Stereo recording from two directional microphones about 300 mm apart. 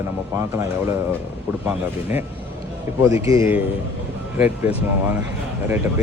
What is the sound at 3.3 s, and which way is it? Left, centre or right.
Speech, centre.